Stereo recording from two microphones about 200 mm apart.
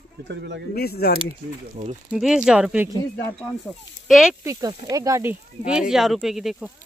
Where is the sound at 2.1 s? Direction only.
Centre (ahead or behind).